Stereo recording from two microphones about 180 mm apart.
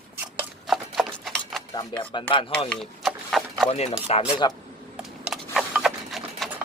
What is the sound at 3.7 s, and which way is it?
Speech, 35° left (ahead or behind).